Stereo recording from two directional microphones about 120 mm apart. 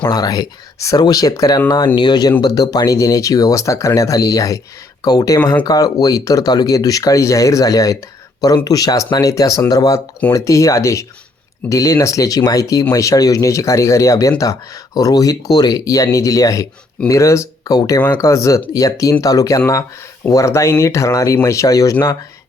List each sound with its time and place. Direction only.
0.0 s speech: 35° left (ahead or behind)